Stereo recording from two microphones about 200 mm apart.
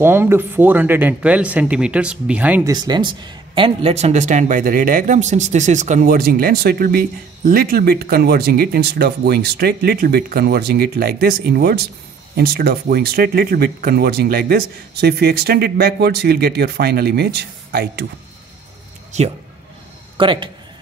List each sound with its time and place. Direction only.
0.0 s speech: 10° right (ahead or behind)
2.7 s speech: 20° right (ahead or behind); by 18.0 s 55° right (ahead or behind)
20.2 s speech: 25° right (ahead or behind)